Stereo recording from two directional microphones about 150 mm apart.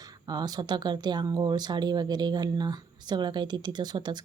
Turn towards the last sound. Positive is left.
turn(degrees=-30)  # may be behind; listen again after turning